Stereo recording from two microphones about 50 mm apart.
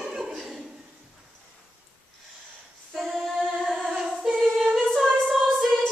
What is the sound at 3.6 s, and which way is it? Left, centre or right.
Singing, centre.